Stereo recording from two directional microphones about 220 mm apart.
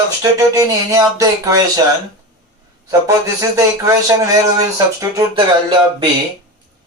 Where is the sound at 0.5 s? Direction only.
15° right (ahead or behind).